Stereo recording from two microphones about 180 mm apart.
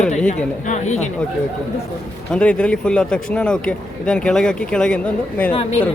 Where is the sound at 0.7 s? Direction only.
40° left (ahead or behind).